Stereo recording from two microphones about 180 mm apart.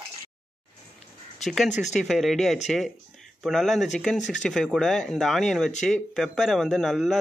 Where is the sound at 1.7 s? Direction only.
40° left (ahead or behind).